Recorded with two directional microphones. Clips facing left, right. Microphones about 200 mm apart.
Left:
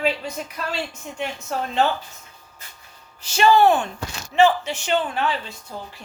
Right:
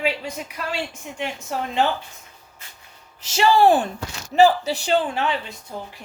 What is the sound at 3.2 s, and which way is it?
Speech, 25° right (ahead or behind).